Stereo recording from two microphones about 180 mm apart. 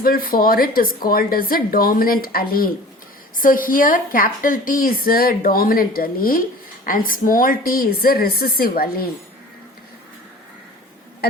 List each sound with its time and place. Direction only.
0.0 s a woman's voice: 55° left (ahead or behind)